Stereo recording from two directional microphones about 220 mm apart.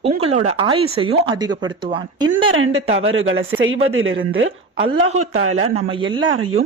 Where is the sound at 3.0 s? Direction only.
65° right (ahead or behind).